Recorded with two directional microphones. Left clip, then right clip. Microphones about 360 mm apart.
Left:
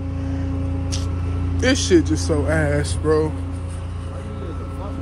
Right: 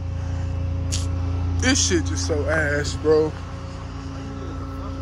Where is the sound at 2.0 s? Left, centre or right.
Centre.